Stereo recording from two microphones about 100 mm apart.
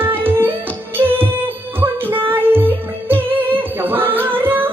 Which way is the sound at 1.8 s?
20° right (ahead or behind).